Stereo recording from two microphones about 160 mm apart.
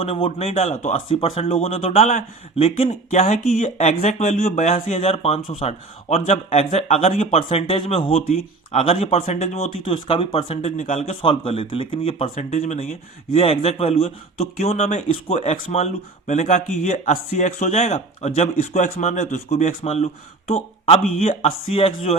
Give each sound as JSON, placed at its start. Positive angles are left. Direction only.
{"t": 0.0, "sound": "speech", "side_deg": 35}
{"t": 21.2, "sound": "speech", "side_deg": 40}